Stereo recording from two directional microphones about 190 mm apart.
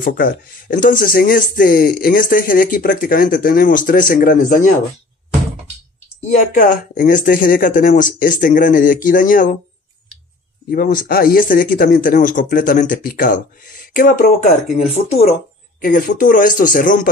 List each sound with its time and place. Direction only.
0.0 s speech: 45° left (ahead or behind)
6.2 s speech: 45° left (ahead or behind)
10.7 s speech: 45° left (ahead or behind)
15.8 s speech: 45° left (ahead or behind)